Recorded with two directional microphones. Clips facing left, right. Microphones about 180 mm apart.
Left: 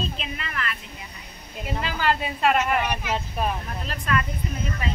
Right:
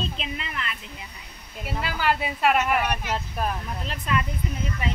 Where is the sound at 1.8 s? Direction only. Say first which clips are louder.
Even; 10° right (ahead or behind).